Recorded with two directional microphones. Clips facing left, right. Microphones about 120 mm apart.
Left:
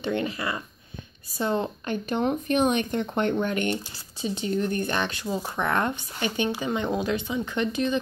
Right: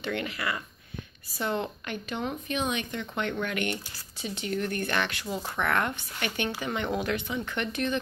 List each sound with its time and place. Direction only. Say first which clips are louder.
0.0 s a woman's voice: left 4 dB; 25° left (ahead or behind)
2.2 s speech: left 8 dB; 50° left (ahead or behind)
3.3 s speech: left 5 dB; 30° left (ahead or behind)